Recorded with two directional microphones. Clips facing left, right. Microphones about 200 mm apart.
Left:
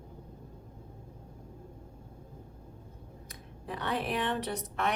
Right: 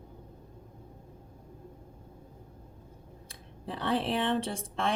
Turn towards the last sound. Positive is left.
turn(degrees=-30)  # may be behind; listen again after turning